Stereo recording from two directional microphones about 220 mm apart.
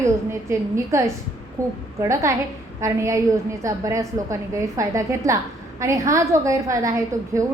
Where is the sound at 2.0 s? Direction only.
15° right (ahead or behind).